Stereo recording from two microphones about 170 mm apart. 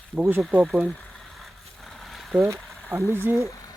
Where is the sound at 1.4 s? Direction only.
Centre (ahead or behind).